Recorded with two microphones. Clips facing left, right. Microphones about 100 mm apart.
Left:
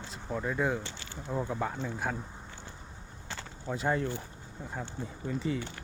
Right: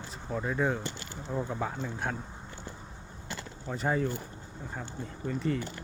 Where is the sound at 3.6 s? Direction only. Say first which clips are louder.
Right 1 dB; centre (ahead or behind).